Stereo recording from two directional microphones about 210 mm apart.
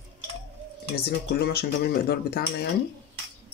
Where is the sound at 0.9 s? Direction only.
50° left (ahead or behind).